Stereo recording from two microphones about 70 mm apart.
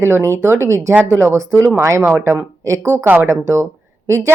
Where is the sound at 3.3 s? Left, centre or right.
Right.